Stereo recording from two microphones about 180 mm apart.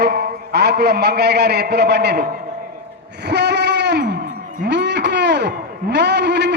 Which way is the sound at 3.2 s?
70° right (ahead or behind).